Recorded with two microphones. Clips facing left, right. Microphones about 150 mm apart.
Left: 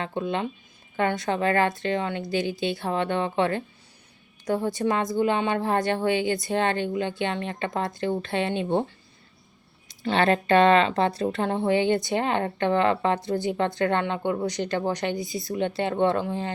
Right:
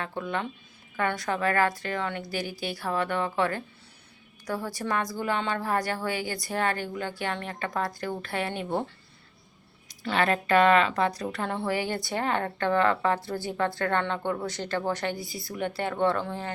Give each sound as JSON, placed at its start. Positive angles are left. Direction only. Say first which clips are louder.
{"t": 0.0, "sound": "a woman's voice", "louder": "left 4 dB", "side_deg": 20}
{"t": 9.9, "sound": "a woman's voice", "louder": "left 4 dB", "side_deg": 25}